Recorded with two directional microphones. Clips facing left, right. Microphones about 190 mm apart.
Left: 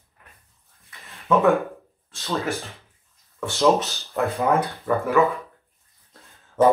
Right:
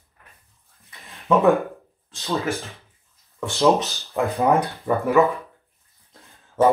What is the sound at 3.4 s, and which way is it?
Speech, 15° right (ahead or behind).